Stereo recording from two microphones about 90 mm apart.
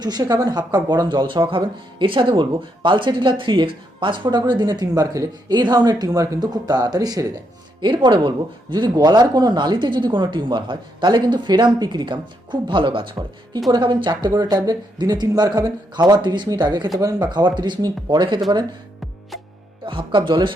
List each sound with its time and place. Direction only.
0.0 s speech: 50° right (ahead or behind)
7.8 s speech: 55° right (ahead or behind)
13.7 s speech: 55° right (ahead or behind)
17.0 s speech: 40° right (ahead or behind)
17.2 s speech: 55° right (ahead or behind)
19.3 s music: centre (ahead or behind)
19.8 s speech: 70° right (ahead or behind)